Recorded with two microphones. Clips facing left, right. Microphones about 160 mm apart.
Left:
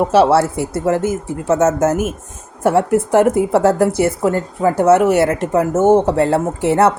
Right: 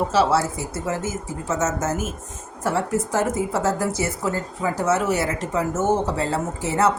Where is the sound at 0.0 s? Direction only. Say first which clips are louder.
Left 7 dB; 60° left (ahead or behind).